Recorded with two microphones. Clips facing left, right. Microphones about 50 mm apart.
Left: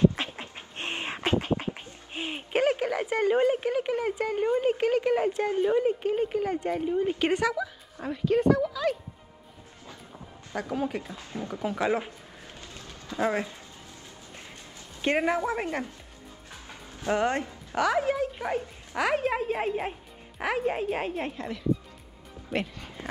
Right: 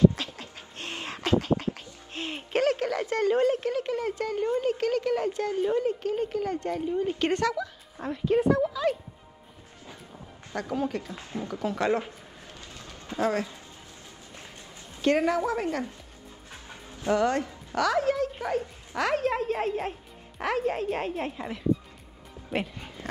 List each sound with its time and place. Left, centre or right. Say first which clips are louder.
0.1 s a sound: left 2 dB; left
5.4 s speech: left 2 dB; centre
10.5 s speech: even; centre
11.1 s speech: right 1 dB; right
11.5 s speech: right 1 dB; centre
13.2 s a woman's voice: even; centre
15.0 s a woman's voice: right 2 dB; left
17.1 s speech: right 2 dB; left; by 21.3 s centre
21.4 s speech: even; centre